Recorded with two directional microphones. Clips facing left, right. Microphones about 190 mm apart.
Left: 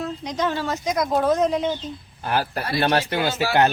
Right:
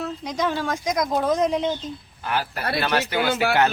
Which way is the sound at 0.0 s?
10° right (ahead or behind).